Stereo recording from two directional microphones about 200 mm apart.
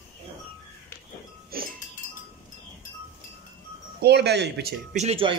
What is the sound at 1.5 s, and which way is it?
Chink, 50° right (ahead or behind).